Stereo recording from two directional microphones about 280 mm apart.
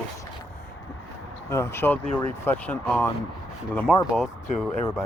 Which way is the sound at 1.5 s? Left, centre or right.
Centre.